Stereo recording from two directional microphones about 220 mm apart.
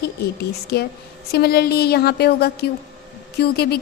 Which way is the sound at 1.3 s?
45° left (ahead or behind).